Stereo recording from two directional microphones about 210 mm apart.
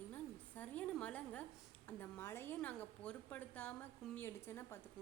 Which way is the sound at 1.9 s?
10° left (ahead or behind).